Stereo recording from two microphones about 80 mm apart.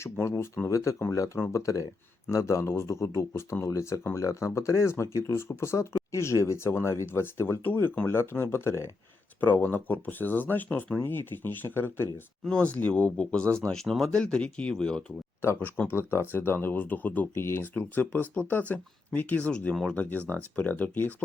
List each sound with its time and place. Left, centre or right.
0.0 s speech: left
9.4 s speech: left
12.5 s speech: centre
13.7 s speech: centre
15.4 s speech: left